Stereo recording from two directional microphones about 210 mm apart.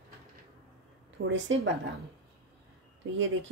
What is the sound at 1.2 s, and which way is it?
Speech, 60° right (ahead or behind).